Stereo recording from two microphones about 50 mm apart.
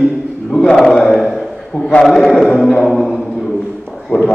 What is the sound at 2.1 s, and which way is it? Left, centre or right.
Speech, centre.